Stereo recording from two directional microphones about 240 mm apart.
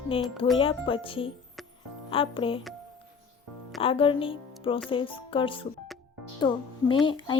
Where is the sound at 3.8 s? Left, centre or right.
Left.